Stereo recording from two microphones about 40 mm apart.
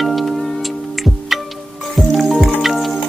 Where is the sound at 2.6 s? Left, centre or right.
Centre.